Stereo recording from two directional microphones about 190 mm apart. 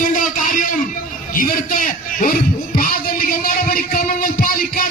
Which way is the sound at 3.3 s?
50° left (ahead or behind).